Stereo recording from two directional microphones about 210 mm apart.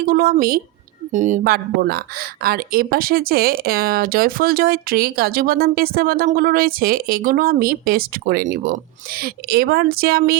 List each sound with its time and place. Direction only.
0.0 s speech: 45° right (ahead or behind)